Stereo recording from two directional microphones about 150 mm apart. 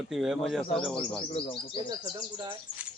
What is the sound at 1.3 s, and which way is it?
Speech, 35° left (ahead or behind).